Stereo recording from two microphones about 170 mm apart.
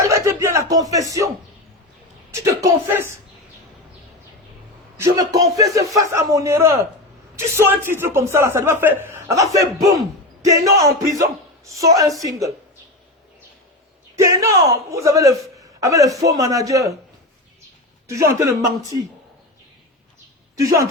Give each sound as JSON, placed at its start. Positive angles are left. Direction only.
{"t": 0.0, "sound": "a sound", "side_deg": -15}
{"t": 2.3, "sound": "a sound", "side_deg": -20}
{"t": 4.9, "sound": "a man's voice", "side_deg": -20}
{"t": 14.2, "sound": "a man's voice", "side_deg": -20}
{"t": 18.1, "sound": "a man's voice", "side_deg": -15}
{"t": 20.6, "sound": "a man's voice", "side_deg": -20}